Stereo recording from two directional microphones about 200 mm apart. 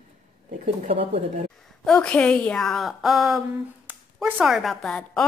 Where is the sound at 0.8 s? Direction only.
35° right (ahead or behind).